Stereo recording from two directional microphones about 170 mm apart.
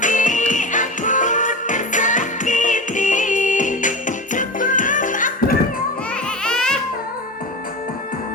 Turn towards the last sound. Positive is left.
turn(degrees=5)  # may be behind; listen again after turning